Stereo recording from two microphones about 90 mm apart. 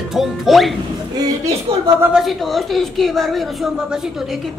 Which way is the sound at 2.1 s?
Centre (ahead or behind).